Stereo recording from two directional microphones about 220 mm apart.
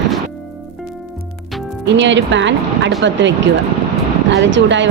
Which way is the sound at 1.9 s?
55° right (ahead or behind).